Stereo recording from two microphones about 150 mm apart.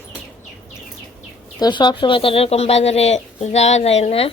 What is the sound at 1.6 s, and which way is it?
Speech, 30° left (ahead or behind).